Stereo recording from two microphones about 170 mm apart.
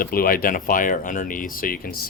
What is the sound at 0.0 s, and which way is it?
Speech, 60° left (ahead or behind).